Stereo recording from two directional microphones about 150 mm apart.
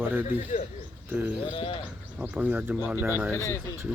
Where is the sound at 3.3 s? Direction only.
20° left (ahead or behind).